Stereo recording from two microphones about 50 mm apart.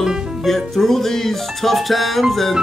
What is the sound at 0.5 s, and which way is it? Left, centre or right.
A man's voice, centre.